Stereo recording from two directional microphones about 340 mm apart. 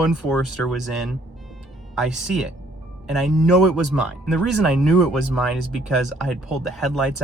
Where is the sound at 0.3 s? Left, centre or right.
Centre.